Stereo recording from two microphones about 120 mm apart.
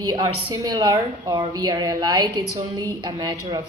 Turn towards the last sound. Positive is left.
turn(degrees=-35)  # may be behind; listen again after turning